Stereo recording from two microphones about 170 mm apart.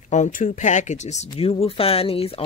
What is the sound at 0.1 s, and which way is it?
Speech, 45° left (ahead or behind).